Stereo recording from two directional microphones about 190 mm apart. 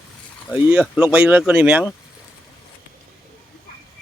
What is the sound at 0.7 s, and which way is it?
Speech, 5° right (ahead or behind).